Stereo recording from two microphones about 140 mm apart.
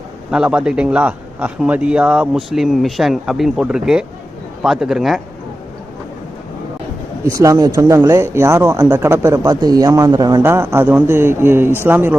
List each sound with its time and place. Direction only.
0.3 s a man's voice: 5° right (ahead or behind)
7.3 s speech: 25° right (ahead or behind)
10.4 s a man's voice: 20° right (ahead or behind)